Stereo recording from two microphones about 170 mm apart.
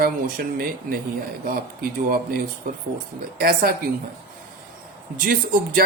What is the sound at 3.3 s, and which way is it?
Speech, 60° right (ahead or behind).